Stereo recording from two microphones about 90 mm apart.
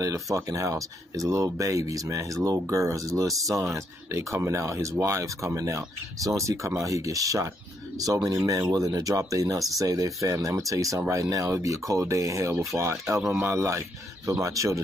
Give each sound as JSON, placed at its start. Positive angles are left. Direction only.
{"t": 0.0, "sound": "speech", "side_deg": -40}